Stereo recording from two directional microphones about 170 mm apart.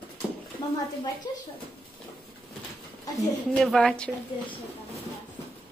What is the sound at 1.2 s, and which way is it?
Speech, 20° left (ahead or behind).